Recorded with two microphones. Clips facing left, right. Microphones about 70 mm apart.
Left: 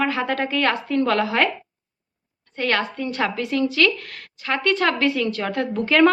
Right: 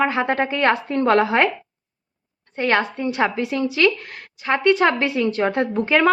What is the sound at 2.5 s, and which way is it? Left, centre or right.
A woman's voice, right.